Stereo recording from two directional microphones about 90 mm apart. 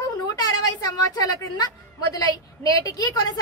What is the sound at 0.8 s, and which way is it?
Speech, 45° left (ahead or behind).